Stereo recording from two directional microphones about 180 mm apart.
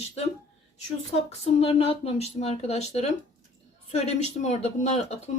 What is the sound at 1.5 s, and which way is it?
Speech, 35° left (ahead or behind).